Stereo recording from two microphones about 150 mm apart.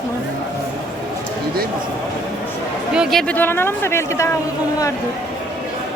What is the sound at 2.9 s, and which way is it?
Speech, centre (ahead or behind).